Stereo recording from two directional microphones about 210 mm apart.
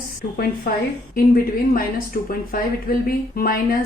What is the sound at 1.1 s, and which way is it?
Speech, 45° left (ahead or behind).